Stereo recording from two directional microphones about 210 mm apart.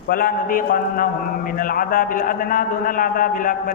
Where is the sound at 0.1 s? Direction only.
40° left (ahead or behind).